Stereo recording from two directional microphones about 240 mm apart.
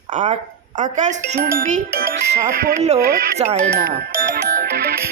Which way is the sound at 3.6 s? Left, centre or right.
Right.